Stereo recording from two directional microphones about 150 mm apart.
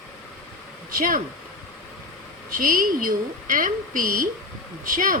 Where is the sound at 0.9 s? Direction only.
65° right (ahead or behind).